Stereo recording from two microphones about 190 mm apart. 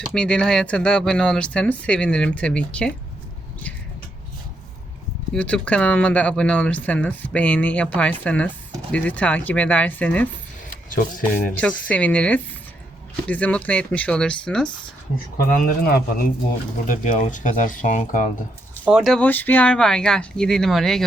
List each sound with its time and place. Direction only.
0.0 s speech: 5° left (ahead or behind)
5.3 s speech: 5° left (ahead or behind)
11.5 s speech: 5° left (ahead or behind)
15.4 s speech: 50° left (ahead or behind)
18.9 s speech: centre (ahead or behind)